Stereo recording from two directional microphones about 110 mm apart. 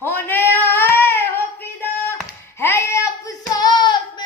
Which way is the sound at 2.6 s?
25° left (ahead or behind).